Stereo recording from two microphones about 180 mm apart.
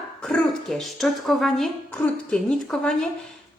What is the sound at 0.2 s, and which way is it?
Speech, 5° left (ahead or behind).